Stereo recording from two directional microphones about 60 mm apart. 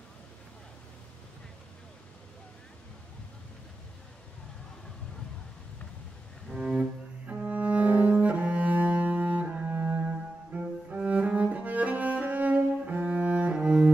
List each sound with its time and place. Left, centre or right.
6.5 s cello: centre